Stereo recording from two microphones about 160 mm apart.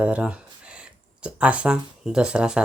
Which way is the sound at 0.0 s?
10° right (ahead or behind).